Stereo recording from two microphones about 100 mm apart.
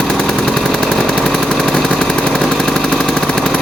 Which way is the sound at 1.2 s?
5° left (ahead or behind).